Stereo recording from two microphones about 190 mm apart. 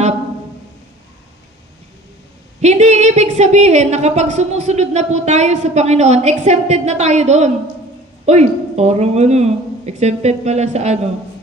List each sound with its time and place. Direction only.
2.6 s a woman's voice: 35° right (ahead or behind)